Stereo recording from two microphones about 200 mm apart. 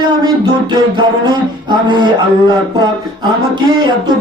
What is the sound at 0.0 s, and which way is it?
Music, 20° right (ahead or behind).